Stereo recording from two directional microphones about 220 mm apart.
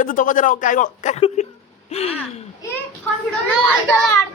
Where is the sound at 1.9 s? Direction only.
30° left (ahead or behind).